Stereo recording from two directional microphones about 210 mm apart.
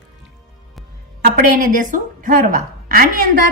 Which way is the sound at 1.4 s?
40° right (ahead or behind).